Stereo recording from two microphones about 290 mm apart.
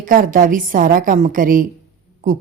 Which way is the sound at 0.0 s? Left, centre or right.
Right.